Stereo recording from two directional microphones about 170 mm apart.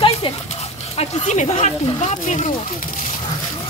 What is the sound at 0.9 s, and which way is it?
Speech, 45° left (ahead or behind).